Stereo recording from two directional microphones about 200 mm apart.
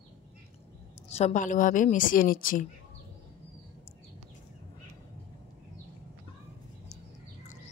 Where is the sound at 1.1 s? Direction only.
35° left (ahead or behind).